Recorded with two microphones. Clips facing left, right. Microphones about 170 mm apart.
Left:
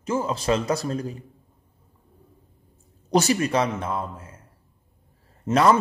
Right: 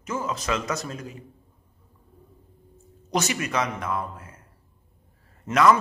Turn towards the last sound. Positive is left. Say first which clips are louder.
# left 1 dB
turn(degrees=30)  # may be behind; listen again after turning